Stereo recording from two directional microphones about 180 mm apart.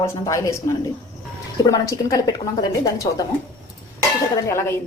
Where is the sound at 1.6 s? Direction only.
20° left (ahead or behind).